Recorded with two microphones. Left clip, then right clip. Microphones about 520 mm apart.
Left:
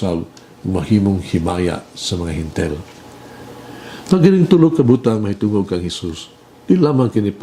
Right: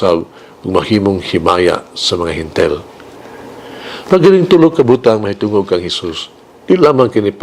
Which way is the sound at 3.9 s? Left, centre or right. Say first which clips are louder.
Right 7 dB; right.